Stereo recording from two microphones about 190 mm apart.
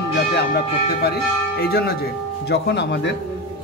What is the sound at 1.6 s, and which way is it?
Church bell, 55° left (ahead or behind).